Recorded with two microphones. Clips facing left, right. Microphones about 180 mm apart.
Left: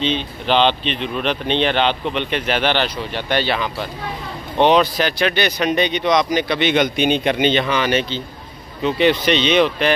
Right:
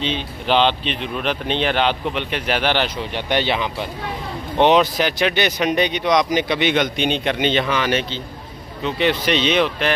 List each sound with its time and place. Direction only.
0.0 s speech: 10° right (ahead or behind)
6.7 s speech: 5° left (ahead or behind)